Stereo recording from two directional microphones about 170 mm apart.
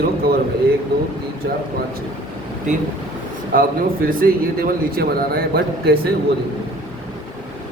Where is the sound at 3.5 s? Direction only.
55° right (ahead or behind).